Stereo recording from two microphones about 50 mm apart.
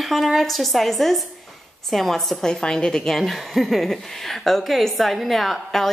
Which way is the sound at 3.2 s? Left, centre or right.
Centre.